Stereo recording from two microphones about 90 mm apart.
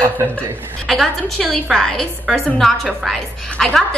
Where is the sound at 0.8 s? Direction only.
5° left (ahead or behind).